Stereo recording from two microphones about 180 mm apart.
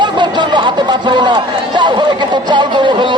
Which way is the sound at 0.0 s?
25° right (ahead or behind).